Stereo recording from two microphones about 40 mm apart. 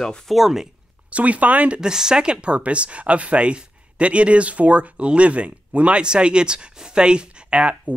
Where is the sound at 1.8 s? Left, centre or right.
Centre.